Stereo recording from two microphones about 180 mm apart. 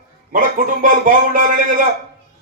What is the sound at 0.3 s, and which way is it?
A man's voice, 50° right (ahead or behind).